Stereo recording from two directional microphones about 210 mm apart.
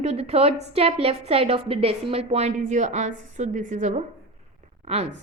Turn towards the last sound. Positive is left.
turn(degrees=-30)  # may be behind; listen again after turning